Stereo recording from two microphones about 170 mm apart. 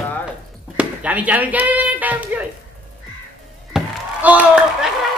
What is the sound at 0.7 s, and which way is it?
Speech, 10° right (ahead or behind).